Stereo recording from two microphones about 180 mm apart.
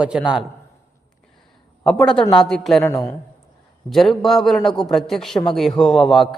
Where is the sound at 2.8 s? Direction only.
15° left (ahead or behind).